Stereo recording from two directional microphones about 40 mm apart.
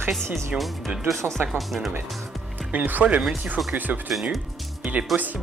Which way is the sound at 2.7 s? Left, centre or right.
Right.